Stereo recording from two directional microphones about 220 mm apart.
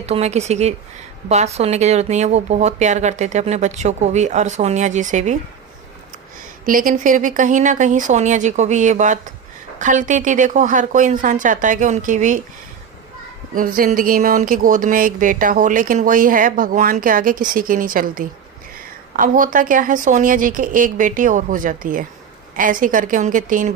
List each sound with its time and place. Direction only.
0.0 s speech: 30° right (ahead or behind)
6.7 s speech: 40° right (ahead or behind)
13.5 s speech: 40° right (ahead or behind)